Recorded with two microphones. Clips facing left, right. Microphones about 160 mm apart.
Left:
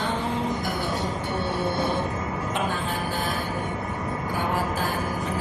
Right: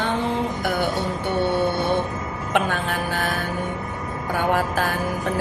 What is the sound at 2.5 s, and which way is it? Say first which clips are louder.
Speech: right 7 dB; 70° right (ahead or behind).